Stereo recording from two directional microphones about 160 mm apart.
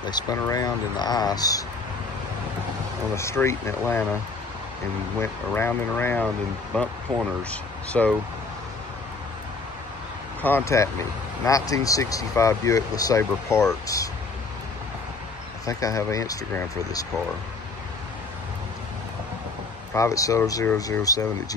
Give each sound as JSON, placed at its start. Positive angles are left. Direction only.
{"t": 0.0, "sound": "speech", "side_deg": 25}
{"t": 3.2, "sound": "speech", "side_deg": 15}
{"t": 5.2, "sound": "speech", "side_deg": 15}
{"t": 8.0, "sound": "speech", "side_deg": 5}
{"t": 10.4, "sound": "speech", "side_deg": 15}
{"t": 15.6, "sound": "speech", "side_deg": 20}
{"t": 19.9, "sound": "speech", "side_deg": 20}